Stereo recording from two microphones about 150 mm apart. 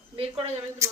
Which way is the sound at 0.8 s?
20° right (ahead or behind).